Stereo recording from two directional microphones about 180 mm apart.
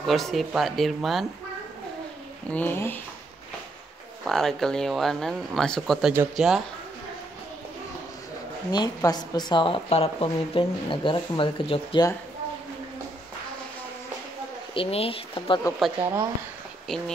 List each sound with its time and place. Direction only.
0.0 s speech: centre (ahead or behind)
2.5 s speech: 10° left (ahead or behind)
4.2 s speech: centre (ahead or behind)
8.7 s a woman's voice: 20° left (ahead or behind)
14.7 s a woman's voice: 30° left (ahead or behind)
16.9 s speech: 5° left (ahead or behind)